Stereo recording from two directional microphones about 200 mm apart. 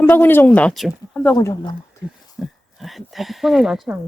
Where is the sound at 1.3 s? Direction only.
20° left (ahead or behind).